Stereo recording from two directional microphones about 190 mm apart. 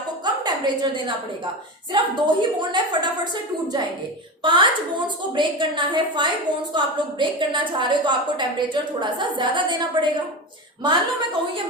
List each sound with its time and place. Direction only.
0.4 s a woman's voice: 25° right (ahead or behind)
4.4 s a woman's voice: 25° right (ahead or behind)